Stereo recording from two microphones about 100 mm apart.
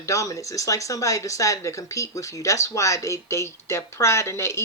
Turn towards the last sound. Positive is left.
turn(degrees=30)  # may be behind; listen again after turning